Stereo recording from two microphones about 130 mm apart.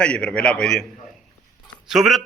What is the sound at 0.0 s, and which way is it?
Speech, 10° left (ahead or behind).